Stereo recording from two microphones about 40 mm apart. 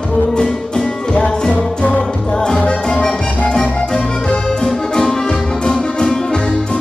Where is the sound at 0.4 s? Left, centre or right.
Left.